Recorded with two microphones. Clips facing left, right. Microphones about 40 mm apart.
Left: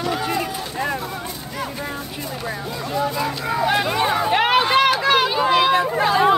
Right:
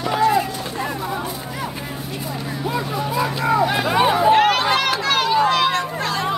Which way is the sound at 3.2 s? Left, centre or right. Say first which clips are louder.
Right 4 dB; centre.